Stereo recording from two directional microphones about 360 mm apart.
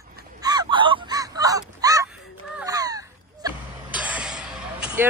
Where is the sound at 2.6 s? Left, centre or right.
Centre.